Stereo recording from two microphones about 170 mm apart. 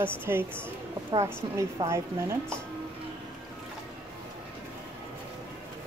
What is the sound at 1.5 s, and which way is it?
Speech, 15° right (ahead or behind).